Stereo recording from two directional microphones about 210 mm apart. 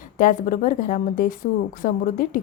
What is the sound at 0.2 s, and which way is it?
Speech, 40° left (ahead or behind).